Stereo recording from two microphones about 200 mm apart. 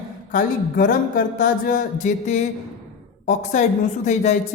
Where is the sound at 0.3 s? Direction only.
45° left (ahead or behind).